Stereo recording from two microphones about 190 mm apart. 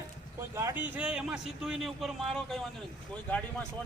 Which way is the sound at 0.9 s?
5° right (ahead or behind).